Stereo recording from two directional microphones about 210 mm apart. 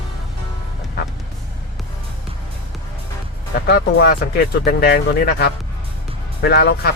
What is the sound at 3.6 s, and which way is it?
Speech, 50° left (ahead or behind).